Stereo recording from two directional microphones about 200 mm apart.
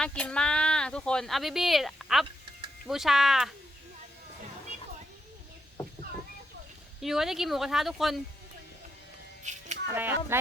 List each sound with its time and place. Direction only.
0.0 s speech: 5° left (ahead or behind)
7.0 s speech: centre (ahead or behind)
9.4 s music: 35° right (ahead or behind)
9.9 s speech: 10° right (ahead or behind)